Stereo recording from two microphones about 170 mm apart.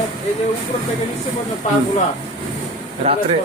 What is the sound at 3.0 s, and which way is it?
Speech, 40° right (ahead or behind).